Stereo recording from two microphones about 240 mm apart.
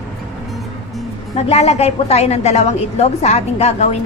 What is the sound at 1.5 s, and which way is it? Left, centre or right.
A woman's voice, left.